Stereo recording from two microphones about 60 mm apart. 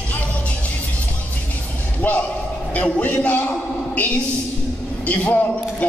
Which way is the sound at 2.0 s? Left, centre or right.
Left.